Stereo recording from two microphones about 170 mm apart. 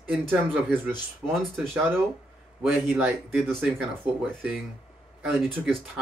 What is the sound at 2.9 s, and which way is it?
Speech, 15° right (ahead or behind).